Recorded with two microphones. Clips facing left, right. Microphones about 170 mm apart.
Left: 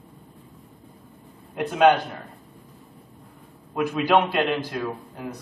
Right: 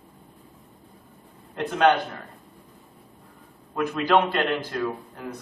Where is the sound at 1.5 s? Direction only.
10° left (ahead or behind).